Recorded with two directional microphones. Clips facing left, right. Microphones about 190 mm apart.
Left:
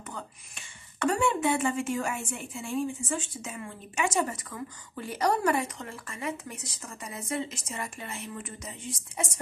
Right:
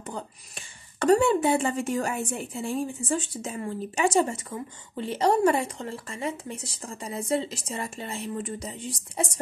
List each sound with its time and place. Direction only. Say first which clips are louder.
0.9 s a woman's voice: right 6 dB; 35° right (ahead or behind)